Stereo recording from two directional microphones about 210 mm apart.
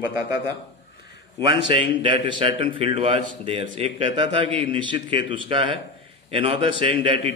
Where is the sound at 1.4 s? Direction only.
25° right (ahead or behind).